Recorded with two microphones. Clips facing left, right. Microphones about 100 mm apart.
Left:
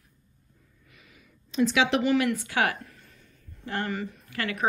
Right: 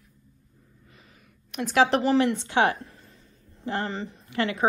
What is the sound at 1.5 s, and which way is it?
A woman's voice, 50° right (ahead or behind).